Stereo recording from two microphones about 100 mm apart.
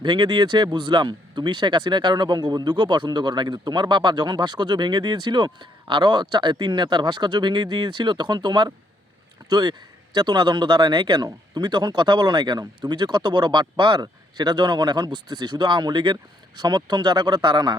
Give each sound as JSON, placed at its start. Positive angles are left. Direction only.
{"t": 0.0, "sound": "speech", "side_deg": -45}